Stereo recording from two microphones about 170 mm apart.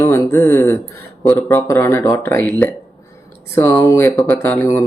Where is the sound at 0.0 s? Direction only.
15° left (ahead or behind).